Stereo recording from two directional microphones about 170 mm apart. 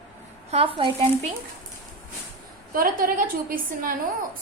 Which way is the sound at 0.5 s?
30° right (ahead or behind).